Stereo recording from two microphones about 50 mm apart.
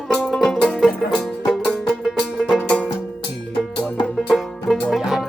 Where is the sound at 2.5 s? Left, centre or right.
Left.